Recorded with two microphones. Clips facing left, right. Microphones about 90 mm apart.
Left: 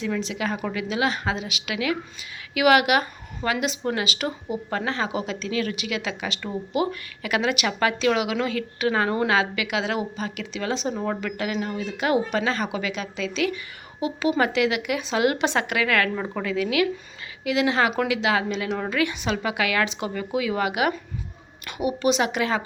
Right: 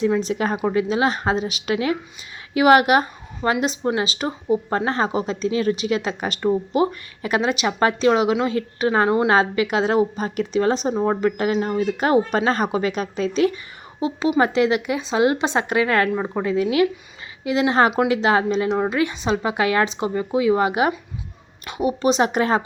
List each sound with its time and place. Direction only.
0.2 s a woman's voice: 40° right (ahead or behind)
0.5 s a woman's voice: 30° right (ahead or behind)
9.3 s a woman's voice: 40° right (ahead or behind)
14.3 s a woman's voice: 25° right (ahead or behind)